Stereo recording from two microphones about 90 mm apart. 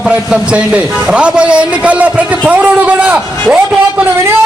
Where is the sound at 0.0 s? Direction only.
10° right (ahead or behind).